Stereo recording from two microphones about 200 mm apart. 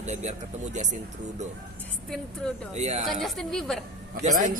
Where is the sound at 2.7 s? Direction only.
35° right (ahead or behind).